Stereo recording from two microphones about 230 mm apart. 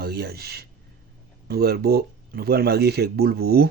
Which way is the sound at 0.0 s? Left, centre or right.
Right.